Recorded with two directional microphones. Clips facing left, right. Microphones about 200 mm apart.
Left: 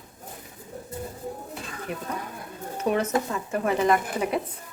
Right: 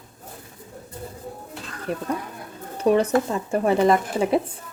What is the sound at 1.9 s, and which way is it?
A woman's voice, 35° right (ahead or behind).